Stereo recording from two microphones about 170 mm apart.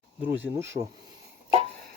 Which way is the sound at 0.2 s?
10° right (ahead or behind).